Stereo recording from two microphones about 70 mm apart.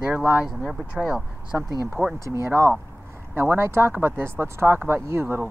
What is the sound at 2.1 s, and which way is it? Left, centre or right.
Speech, right.